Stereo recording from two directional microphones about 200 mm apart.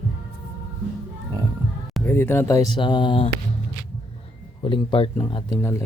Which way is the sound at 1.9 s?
10° left (ahead or behind).